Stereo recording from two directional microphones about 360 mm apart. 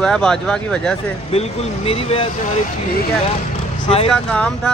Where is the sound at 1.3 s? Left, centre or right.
Centre.